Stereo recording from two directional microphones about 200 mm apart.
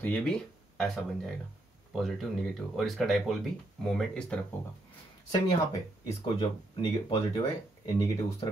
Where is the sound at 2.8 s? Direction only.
Centre (ahead or behind).